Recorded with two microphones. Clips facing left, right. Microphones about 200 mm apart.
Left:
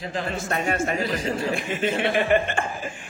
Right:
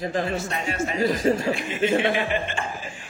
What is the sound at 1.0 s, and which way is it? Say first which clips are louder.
Speech: right 5 dB; 45° right (ahead or behind).